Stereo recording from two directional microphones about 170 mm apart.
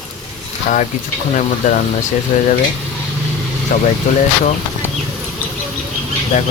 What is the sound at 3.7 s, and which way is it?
Speech, 50° left (ahead or behind).